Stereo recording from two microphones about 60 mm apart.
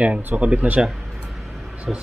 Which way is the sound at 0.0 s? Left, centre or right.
Right.